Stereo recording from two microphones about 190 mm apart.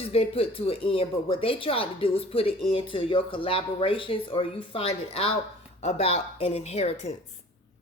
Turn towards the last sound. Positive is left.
turn(degrees=35)  # may be behind; listen again after turning